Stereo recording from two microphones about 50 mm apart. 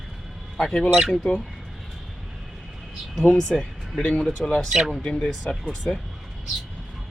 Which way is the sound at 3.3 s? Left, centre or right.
Centre.